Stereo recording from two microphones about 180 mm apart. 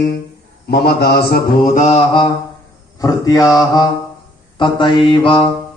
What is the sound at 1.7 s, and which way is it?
Speech, 40° left (ahead or behind).